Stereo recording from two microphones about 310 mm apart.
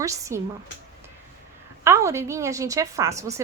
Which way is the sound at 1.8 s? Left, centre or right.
Centre.